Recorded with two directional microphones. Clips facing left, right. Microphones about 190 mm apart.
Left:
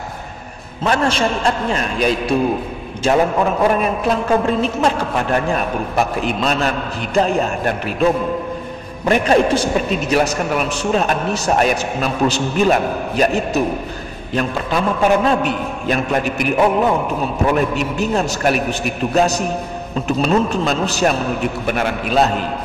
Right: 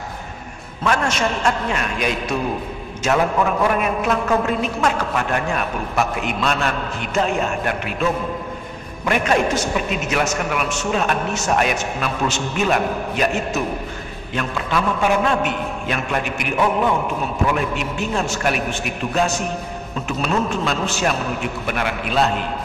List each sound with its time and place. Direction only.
0.8 s a man's voice: 30° left (ahead or behind)